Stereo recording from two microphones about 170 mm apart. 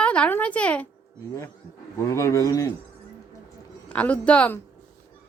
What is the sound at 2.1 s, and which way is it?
Speech, 20° left (ahead or behind).